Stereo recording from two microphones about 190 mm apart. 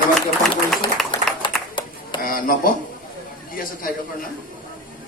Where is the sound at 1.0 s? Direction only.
Centre (ahead or behind).